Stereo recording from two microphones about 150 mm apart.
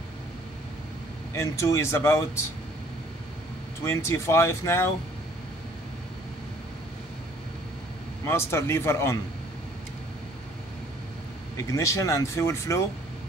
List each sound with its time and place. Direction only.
1.3 s speech: 20° left (ahead or behind)
3.8 s speech: 20° left (ahead or behind)
8.3 s speech: 15° left (ahead or behind)
11.5 s speech: 20° left (ahead or behind)